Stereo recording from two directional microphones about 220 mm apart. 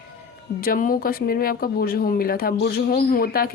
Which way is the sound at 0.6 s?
40° left (ahead or behind).